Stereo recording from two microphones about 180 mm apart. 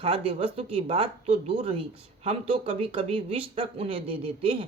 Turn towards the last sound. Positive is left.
turn(degrees=-30)  # may be behind; listen again after turning